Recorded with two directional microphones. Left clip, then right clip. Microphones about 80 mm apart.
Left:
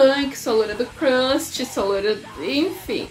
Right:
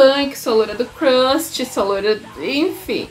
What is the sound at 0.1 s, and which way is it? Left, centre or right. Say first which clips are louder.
A woman's voice: right 4 dB; centre.